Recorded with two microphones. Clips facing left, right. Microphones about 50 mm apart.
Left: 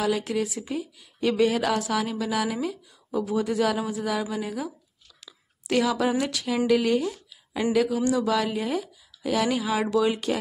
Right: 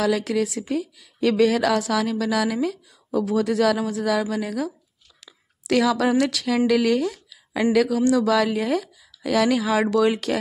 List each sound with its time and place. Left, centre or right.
0.0 s speech: right
5.7 s speech: right